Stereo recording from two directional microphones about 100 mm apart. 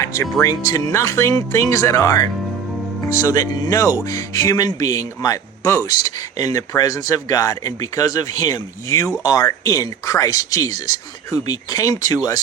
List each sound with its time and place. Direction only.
0.0 s speech: 30° left (ahead or behind)